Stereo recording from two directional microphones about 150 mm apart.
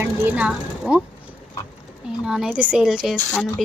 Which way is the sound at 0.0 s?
10° right (ahead or behind).